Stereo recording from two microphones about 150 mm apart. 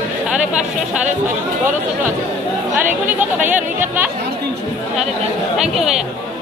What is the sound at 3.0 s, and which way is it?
Speech, 10° right (ahead or behind).